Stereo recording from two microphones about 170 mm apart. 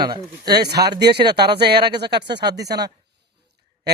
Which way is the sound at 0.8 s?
75° right (ahead or behind).